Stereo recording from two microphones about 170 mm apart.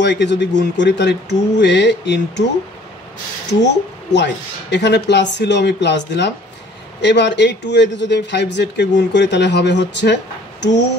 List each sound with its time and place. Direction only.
0.0 s a man's voice: 90° left
3.6 s a man's voice: 90° left